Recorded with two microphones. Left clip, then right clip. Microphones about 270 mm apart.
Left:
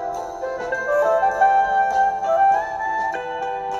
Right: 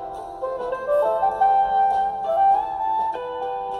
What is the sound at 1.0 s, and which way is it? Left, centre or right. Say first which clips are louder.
Music: left 4 dB; left.